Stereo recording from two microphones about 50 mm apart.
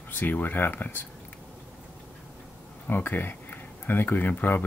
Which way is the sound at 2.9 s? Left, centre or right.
Left.